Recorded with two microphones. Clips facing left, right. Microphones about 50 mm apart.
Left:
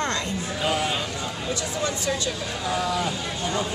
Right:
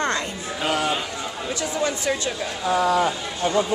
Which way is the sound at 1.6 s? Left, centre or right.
Right.